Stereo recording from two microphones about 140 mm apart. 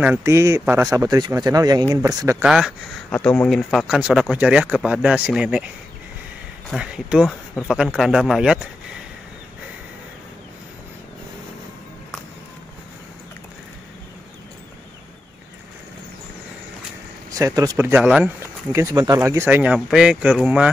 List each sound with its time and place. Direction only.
0.0 s speech: 15° right (ahead or behind)
2.4 s speech: 5° right (ahead or behind)
3.1 s speech: 10° left (ahead or behind)
6.7 s speech: 5° right (ahead or behind)
17.3 s speech: 25° right (ahead or behind)
18.7 s speech: 20° right (ahead or behind)